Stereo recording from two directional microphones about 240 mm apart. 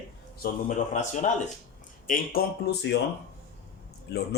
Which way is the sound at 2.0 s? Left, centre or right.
Left.